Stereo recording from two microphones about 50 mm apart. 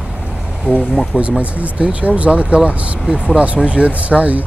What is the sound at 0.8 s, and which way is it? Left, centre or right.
Speech, centre.